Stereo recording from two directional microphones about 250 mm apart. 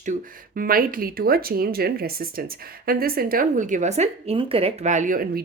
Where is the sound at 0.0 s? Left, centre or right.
Right.